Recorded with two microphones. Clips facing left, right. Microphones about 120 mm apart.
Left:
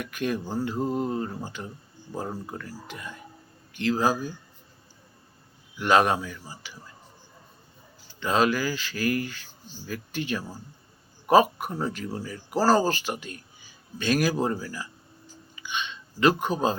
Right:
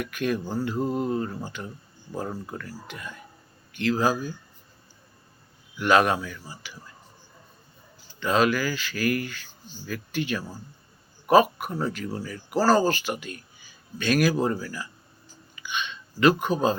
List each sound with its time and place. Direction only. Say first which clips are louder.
0.0 s speech: right 2 dB; 30° left (ahead or behind)
5.8 s speech: right 1 dB; 30° left (ahead or behind)
8.2 s speech: right 1 dB; 30° left (ahead or behind)
11.5 s speech: right 1 dB; 25° left (ahead or behind)
15.5 s a sound: right 1 dB; 30° left (ahead or behind)